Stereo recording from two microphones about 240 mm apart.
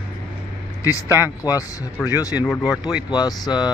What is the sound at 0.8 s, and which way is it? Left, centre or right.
Speech, centre.